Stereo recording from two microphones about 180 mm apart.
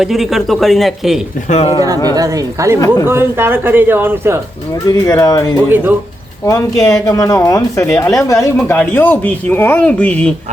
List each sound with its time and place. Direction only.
0.0 s speech: centre (ahead or behind)
1.5 s speech: 35° left (ahead or behind)
2.1 s speech: 20° right (ahead or behind)
2.8 s speech: 20° left (ahead or behind)
3.1 s speech: 10° right (ahead or behind)
4.9 s speech: 20° left (ahead or behind)
5.6 s speech: 10° right (ahead or behind)
6.4 s speech: 20° left (ahead or behind)